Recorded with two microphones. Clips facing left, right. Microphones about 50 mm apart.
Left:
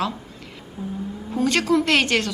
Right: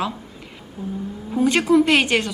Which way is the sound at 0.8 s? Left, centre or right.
Centre.